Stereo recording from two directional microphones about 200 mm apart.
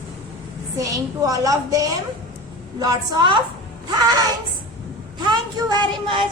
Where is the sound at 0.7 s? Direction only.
15° right (ahead or behind).